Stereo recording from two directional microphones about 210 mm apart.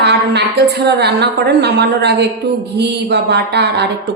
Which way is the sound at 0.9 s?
55° right (ahead or behind).